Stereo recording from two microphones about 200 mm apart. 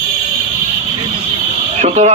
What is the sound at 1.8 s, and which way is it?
Speech, 35° right (ahead or behind).